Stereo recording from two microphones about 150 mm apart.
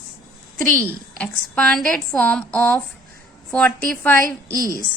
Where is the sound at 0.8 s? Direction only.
10° left (ahead or behind).